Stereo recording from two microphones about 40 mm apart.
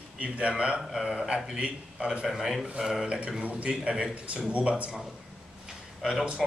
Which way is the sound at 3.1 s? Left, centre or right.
Right.